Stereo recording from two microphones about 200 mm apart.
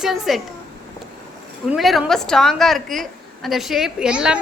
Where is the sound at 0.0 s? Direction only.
Centre (ahead or behind).